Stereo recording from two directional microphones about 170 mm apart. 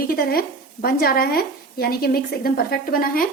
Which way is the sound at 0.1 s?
60° left (ahead or behind).